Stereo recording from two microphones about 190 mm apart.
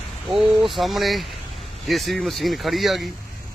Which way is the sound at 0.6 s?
Centre (ahead or behind).